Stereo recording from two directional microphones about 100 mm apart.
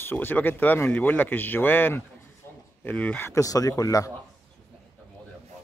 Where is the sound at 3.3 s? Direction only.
35° left (ahead or behind).